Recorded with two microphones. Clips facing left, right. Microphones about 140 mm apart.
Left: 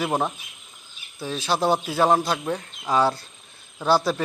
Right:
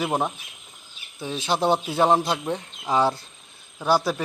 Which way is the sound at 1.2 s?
20° right (ahead or behind).